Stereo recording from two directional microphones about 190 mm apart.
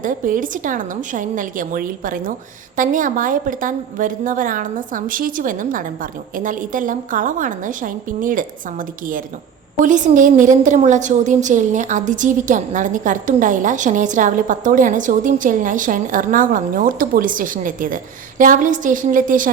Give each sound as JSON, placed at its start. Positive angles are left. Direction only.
{"t": 0.0, "sound": "a woman's voice", "side_deg": -45}
{"t": 9.8, "sound": "a woman's voice", "side_deg": -40}